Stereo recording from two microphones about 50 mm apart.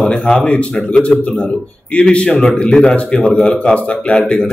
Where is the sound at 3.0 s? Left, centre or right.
Left.